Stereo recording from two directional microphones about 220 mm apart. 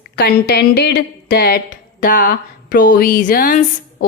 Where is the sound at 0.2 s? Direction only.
50° left (ahead or behind).